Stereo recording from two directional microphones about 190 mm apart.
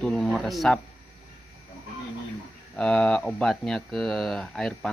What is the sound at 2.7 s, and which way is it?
Speech, 5° left (ahead or behind).